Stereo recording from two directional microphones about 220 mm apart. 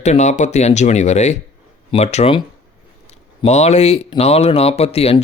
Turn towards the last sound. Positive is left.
turn(degrees=25)  # may be behind; listen again after turning